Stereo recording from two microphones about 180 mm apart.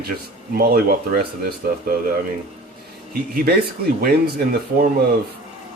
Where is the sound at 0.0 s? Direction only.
60° right (ahead or behind).